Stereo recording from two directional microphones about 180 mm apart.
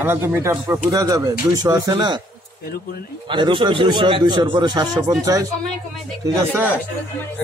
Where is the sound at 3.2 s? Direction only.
30° right (ahead or behind).